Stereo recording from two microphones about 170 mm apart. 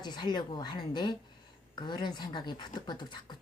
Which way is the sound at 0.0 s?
25° left (ahead or behind).